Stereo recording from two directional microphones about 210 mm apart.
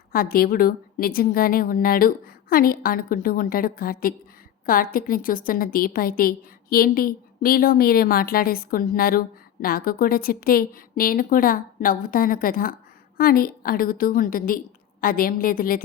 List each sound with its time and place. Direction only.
0.1 s a woman's voice: 45° left (ahead or behind)